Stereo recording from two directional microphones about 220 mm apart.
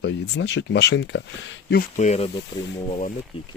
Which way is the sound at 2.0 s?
30° left (ahead or behind).